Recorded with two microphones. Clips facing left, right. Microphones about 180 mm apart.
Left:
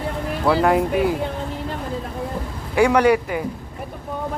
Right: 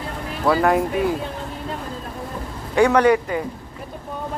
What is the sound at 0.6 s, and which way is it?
Speech, 20° left (ahead or behind).